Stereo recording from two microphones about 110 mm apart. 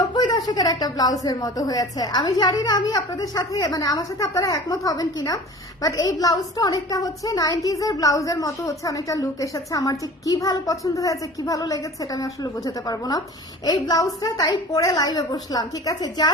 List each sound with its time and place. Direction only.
0.1 s a woman's voice: 40° left (ahead or behind)